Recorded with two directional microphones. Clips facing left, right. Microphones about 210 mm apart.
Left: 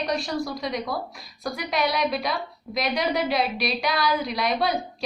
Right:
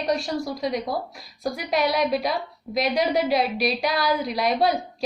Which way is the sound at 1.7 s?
45° right (ahead or behind).